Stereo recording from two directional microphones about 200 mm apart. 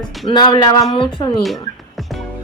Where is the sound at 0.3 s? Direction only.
25° left (ahead or behind).